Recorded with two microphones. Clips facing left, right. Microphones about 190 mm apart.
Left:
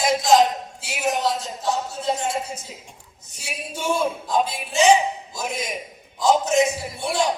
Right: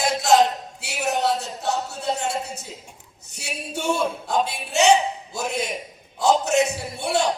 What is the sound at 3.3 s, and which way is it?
Speech, 65° right (ahead or behind).